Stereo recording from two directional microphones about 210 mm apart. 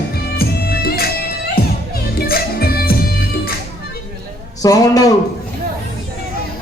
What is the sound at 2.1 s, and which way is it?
Music, 45° left (ahead or behind).